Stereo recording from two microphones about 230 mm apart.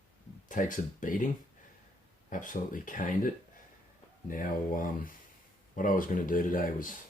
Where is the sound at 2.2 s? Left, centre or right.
Left.